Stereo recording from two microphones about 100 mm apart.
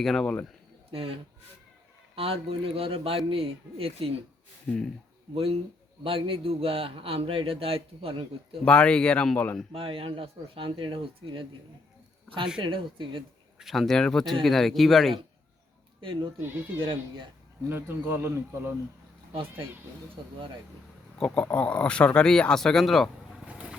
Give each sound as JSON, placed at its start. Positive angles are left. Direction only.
{"t": 0.0, "sound": "speech", "side_deg": 5}
{"t": 0.9, "sound": "a man's voice", "side_deg": -70}
{"t": 5.3, "sound": "a man's voice", "side_deg": -70}
{"t": 8.6, "sound": "speech", "side_deg": 10}
{"t": 9.7, "sound": "speech", "side_deg": -65}
{"t": 12.5, "sound": "speech", "side_deg": -55}
{"t": 13.6, "sound": "speech", "side_deg": 0}
{"t": 16.0, "sound": "speech", "side_deg": -55}
{"t": 17.7, "sound": "a man's voice", "side_deg": -20}
{"t": 19.3, "sound": "speech", "side_deg": -65}
{"t": 20.2, "sound": "speech", "side_deg": -50}
{"t": 21.2, "sound": "speech", "side_deg": 10}
{"t": 23.5, "sound": "vehicle", "side_deg": -10}